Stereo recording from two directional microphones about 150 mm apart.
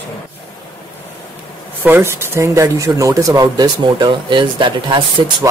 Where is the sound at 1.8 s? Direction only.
15° right (ahead or behind); by 5.3 s 35° right (ahead or behind).